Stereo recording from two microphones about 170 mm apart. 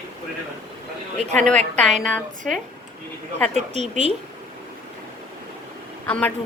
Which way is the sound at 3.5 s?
40° right (ahead or behind).